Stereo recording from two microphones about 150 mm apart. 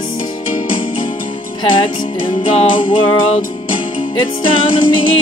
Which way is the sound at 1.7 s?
35° left (ahead or behind).